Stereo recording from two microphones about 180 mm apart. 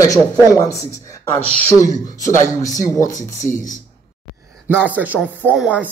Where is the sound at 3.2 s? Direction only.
45° left (ahead or behind).